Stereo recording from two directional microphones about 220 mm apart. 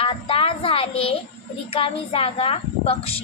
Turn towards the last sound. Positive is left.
turn(degrees=25)  # may be behind; listen again after turning